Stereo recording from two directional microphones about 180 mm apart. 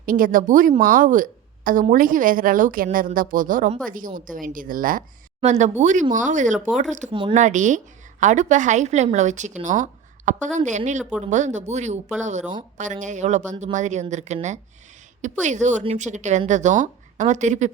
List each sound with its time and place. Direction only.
0.0 s speech: 50° right (ahead or behind)
5.4 s speech: 40° right (ahead or behind)
7.1 s speech: 30° right (ahead or behind)
7.3 s a woman's voice: 45° right (ahead or behind)